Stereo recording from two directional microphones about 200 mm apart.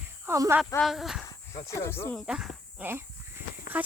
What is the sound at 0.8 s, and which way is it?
Speech, centre (ahead or behind).